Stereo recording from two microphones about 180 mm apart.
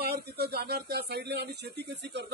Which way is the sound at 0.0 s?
65° right (ahead or behind).